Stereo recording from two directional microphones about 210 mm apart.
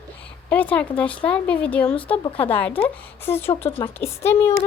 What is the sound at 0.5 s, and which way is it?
Speech, 5° left (ahead or behind).